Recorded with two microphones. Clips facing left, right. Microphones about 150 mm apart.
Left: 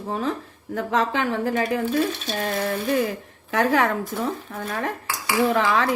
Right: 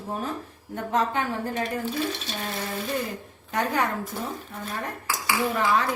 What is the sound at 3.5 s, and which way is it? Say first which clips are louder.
Speech: left 5 dB; 90° left.